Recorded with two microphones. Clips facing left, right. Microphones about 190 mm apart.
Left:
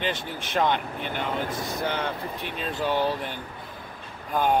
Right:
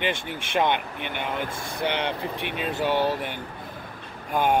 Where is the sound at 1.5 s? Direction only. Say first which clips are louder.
Right 1 dB; 25° right (ahead or behind).